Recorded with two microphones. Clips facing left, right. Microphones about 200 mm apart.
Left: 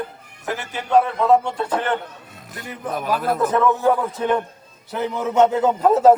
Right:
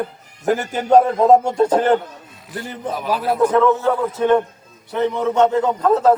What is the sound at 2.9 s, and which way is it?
Speech, 50° left (ahead or behind).